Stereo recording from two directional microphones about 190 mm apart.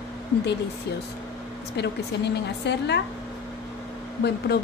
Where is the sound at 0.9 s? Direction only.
60° left (ahead or behind).